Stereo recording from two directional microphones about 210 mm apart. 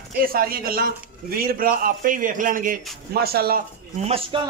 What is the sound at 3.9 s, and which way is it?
Speech, 30° right (ahead or behind).